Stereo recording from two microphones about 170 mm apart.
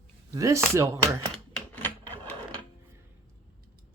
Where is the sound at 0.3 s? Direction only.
20° right (ahead or behind).